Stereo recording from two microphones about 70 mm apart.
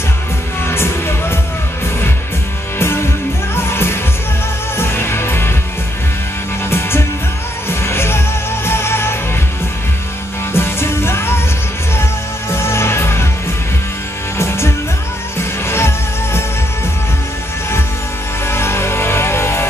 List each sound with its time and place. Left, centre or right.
0.7 s music: left
2.8 s music: left
6.7 s music: left
10.5 s music: left
15.6 s music: left
18.4 s music: left